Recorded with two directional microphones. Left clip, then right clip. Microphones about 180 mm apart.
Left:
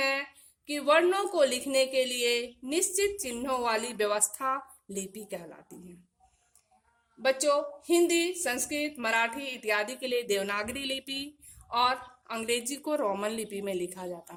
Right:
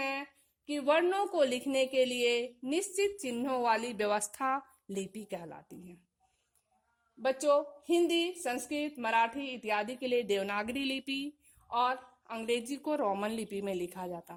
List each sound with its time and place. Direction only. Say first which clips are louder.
0.0 s a woman's voice: left 7 dB; 30° right (ahead or behind)
7.2 s a woman's voice: left 2 dB; 30° right (ahead or behind)